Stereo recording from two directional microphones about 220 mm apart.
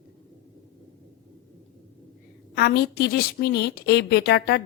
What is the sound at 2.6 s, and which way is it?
Speech, 50° left (ahead or behind).